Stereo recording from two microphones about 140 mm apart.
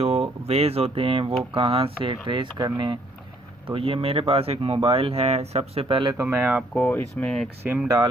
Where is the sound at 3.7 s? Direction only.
40° right (ahead or behind).